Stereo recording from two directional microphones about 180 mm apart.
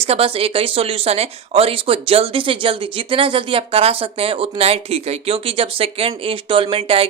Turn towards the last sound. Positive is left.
turn(degrees=-30)  # may be behind; listen again after turning